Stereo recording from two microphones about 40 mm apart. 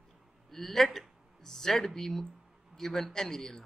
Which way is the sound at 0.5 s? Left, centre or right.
Centre.